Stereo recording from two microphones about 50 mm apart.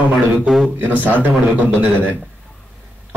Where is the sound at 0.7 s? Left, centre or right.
Right.